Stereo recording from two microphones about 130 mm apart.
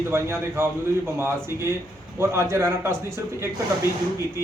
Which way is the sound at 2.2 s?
20° right (ahead or behind).